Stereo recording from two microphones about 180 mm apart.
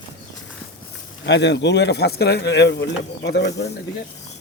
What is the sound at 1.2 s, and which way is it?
Speech, 70° left (ahead or behind).